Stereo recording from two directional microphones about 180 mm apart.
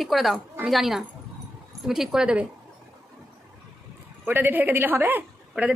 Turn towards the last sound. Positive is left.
turn(degrees=-10)  # may be behind; listen again after turning